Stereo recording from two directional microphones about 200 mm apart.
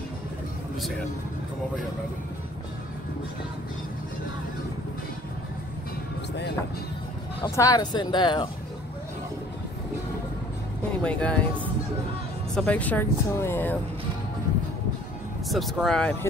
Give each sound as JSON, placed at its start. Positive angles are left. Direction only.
{"t": 7.4, "sound": "speech", "side_deg": 20}
{"t": 11.0, "sound": "speech", "side_deg": 5}
{"t": 15.5, "sound": "speech", "side_deg": 0}